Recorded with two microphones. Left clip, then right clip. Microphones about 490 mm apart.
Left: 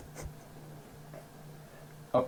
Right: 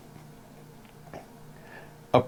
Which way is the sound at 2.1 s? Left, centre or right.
Right.